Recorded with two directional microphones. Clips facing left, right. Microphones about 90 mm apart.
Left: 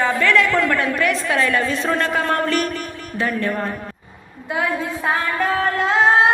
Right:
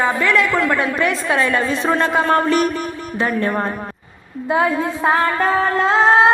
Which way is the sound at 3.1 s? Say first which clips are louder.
Right 2 dB; 30° right (ahead or behind).